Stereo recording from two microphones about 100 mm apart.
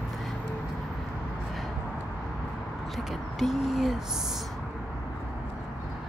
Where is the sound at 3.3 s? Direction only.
Centre (ahead or behind).